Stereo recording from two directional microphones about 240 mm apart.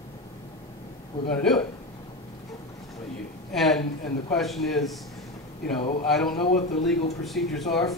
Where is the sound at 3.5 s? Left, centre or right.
Centre.